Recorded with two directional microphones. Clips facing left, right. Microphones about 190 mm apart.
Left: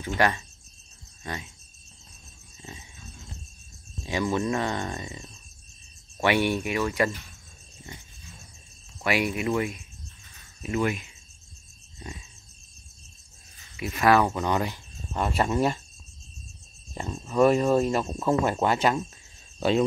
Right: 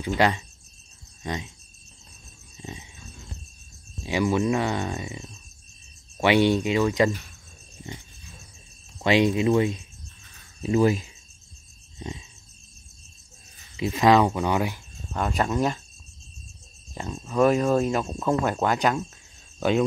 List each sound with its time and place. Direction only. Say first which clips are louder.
0.0 s speech: right 2 dB; 15° right (ahead or behind)
2.5 s a sound: right 5 dB; 20° right (ahead or behind)
4.0 s speech: right 3 dB; 10° right (ahead or behind)
9.0 s speech: right 6 dB; 20° right (ahead or behind)
13.7 s speech: right 3 dB; 20° right (ahead or behind); by 15.8 s 5° left (ahead or behind)
16.9 s speech: even; centre (ahead or behind)